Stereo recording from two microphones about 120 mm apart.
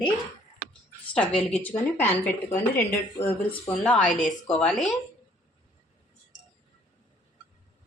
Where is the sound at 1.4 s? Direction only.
10° left (ahead or behind).